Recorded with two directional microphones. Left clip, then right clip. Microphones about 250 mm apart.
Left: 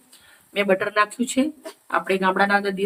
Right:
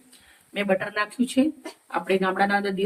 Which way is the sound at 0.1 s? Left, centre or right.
Left.